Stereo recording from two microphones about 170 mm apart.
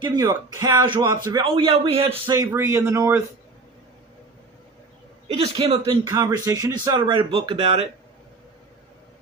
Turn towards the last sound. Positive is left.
turn(degrees=-35)  # may be behind; listen again after turning